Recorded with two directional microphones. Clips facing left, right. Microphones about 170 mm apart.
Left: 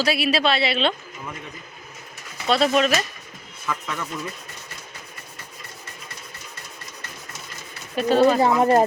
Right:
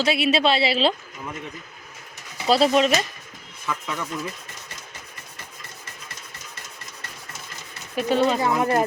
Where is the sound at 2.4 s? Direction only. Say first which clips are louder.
Right 1 dB; 30° right (ahead or behind).